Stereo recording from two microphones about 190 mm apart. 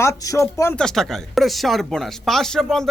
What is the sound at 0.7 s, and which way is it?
A man's voice, centre (ahead or behind).